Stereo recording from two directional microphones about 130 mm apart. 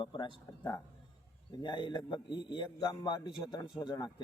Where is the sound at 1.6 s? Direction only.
35° left (ahead or behind).